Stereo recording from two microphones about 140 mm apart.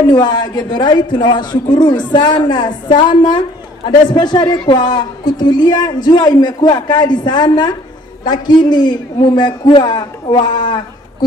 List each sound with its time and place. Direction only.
0.1 s a woman's voice: 30° left (ahead or behind)